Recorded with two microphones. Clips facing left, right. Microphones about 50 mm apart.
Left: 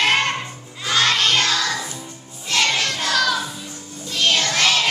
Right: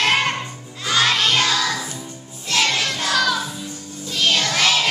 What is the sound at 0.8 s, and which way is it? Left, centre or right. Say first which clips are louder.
Child singing: even; centre.